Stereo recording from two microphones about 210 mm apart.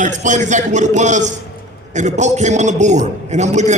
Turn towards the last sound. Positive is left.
turn(degrees=-35)  # may be behind; listen again after turning